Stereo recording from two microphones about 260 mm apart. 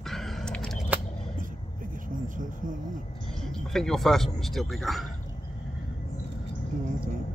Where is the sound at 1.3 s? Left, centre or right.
Right.